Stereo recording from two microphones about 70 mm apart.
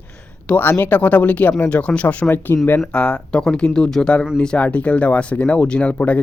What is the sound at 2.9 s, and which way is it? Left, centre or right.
Speech, centre.